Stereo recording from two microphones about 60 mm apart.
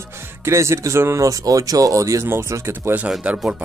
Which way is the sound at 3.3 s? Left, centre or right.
Centre.